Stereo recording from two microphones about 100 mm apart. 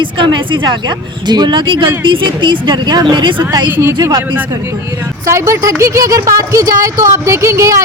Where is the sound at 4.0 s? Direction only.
45° right (ahead or behind).